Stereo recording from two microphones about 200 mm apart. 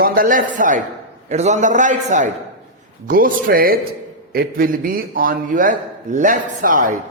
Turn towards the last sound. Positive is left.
turn(degrees=-40)  # may be behind; listen again after turning